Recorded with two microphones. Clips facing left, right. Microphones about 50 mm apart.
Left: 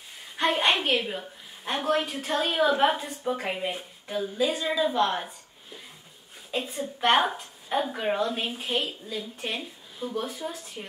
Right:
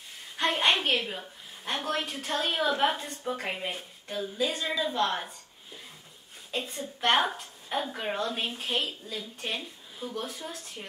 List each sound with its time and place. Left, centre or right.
0.4 s a woman's voice: centre